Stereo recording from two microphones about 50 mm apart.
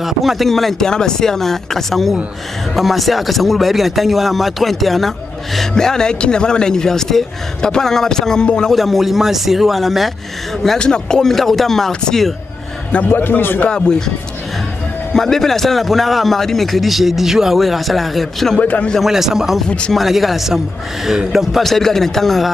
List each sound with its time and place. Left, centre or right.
0.0 s a man's voice: centre
8.7 s a man's voice: centre
10.8 s a man's voice: centre
13.1 s speech: left
13.7 s speech: centre
15.1 s a man's voice: centre
18.6 s a man's voice: left
18.9 s a man's voice: centre